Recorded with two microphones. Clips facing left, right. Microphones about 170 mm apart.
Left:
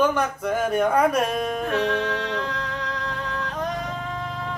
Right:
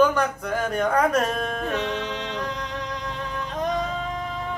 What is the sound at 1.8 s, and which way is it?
Music, 20° right (ahead or behind).